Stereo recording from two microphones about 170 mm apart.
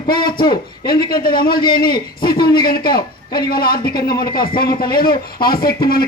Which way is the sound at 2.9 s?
25° left (ahead or behind).